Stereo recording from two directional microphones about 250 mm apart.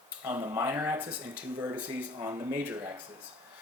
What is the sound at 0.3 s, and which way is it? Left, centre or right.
Speech, centre.